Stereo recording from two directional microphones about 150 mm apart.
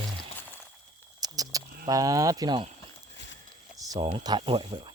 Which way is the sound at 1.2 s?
25° right (ahead or behind).